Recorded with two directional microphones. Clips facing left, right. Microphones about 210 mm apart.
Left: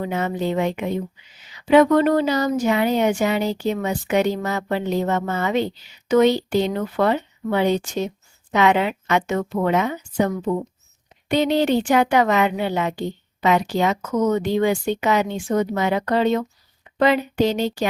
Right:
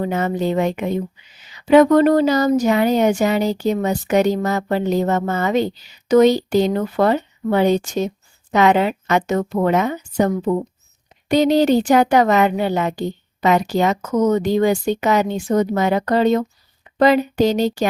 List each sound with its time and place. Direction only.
0.0 s speech: 45° right (ahead or behind)